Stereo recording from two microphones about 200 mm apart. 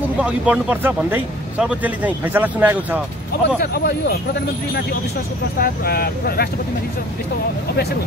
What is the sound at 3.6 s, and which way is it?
Speech, 55° left (ahead or behind).